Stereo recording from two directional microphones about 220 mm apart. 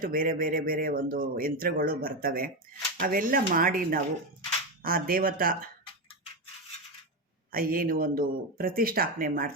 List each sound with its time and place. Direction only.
0.0 s speech: 40° right (ahead or behind)
7.5 s speech: 40° right (ahead or behind)